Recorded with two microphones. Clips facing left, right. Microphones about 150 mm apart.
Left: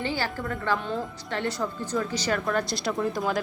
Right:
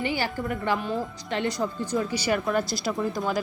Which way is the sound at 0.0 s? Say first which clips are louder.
Right 2 dB; 15° right (ahead or behind).